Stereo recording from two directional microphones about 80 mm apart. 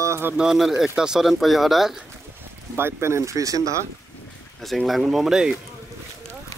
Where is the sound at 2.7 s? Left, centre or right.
Right.